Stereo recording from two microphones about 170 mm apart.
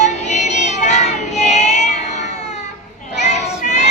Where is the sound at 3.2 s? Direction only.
45° left (ahead or behind).